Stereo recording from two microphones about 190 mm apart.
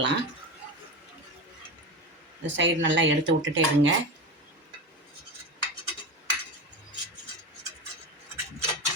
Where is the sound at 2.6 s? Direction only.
75° right (ahead or behind).